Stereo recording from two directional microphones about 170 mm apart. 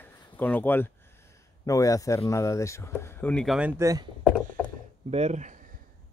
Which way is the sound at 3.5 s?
15° right (ahead or behind).